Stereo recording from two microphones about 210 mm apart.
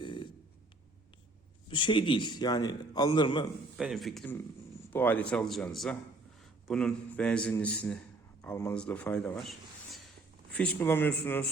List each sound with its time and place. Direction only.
0.0 s a sound: 20° left (ahead or behind)
1.7 s a man's voice: 25° left (ahead or behind)
3.8 s a man's voice: centre (ahead or behind)